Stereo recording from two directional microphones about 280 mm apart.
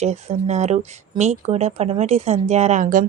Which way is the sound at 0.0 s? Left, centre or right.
Right.